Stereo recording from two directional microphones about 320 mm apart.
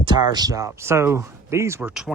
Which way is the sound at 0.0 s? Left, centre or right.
Centre.